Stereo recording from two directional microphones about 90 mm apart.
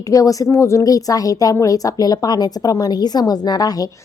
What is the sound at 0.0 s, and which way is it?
A woman's voice, 40° left (ahead or behind).